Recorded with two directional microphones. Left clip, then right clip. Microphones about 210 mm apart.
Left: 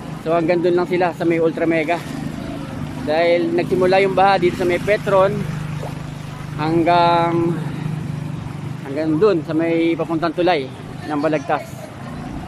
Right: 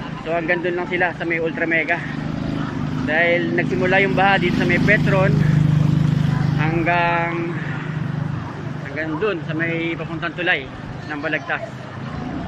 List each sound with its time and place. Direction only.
0.3 s speech: 20° left (ahead or behind)
3.1 s speech: 20° left (ahead or behind)
5.3 s vehicle: centre (ahead or behind)
6.6 s speech: 20° left (ahead or behind)
8.9 s speech: 25° left (ahead or behind)